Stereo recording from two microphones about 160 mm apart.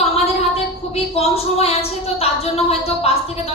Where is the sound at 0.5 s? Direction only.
40° left (ahead or behind).